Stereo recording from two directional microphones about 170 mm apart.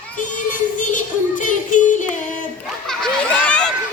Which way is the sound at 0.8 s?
50° left (ahead or behind).